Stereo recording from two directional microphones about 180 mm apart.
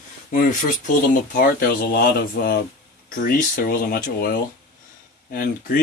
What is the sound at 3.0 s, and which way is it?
Speech, 50° left (ahead or behind).